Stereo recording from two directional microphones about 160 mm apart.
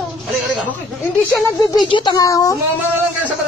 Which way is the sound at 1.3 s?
25° left (ahead or behind).